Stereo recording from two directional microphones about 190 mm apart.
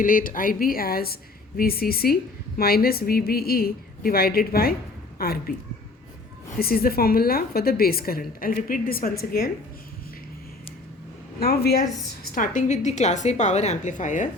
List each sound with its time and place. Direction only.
0.0 s a woman's voice: 45° left (ahead or behind)
6.6 s a woman's voice: 55° left (ahead or behind)
11.3 s a woman's voice: 55° left (ahead or behind)